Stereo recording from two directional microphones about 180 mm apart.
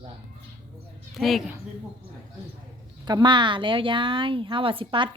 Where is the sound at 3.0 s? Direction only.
25° right (ahead or behind).